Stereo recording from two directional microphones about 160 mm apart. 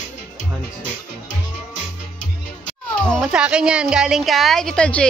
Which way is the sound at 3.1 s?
Centre (ahead or behind).